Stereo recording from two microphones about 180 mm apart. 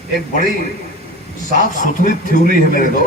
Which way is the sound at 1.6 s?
45° left (ahead or behind).